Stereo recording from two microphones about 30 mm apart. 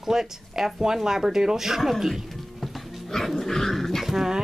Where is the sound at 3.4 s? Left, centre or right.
Centre.